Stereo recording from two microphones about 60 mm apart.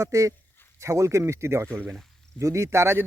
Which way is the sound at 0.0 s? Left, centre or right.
Right.